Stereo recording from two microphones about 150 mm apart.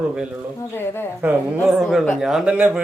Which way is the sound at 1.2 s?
10° right (ahead or behind).